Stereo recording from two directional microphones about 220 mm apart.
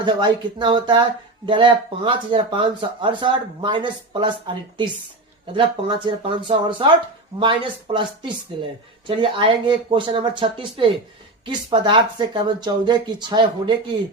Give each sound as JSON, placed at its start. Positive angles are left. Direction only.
{"t": 0.0, "sound": "speech", "side_deg": -20}
{"t": 6.1, "sound": "speech", "side_deg": -25}